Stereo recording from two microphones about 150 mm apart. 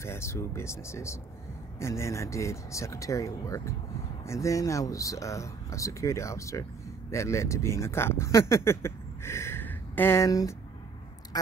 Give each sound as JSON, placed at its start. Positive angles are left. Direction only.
{"t": 0.0, "sound": "speech", "side_deg": 20}